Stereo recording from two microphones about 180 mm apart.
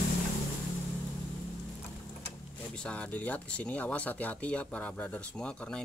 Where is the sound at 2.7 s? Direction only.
5° left (ahead or behind).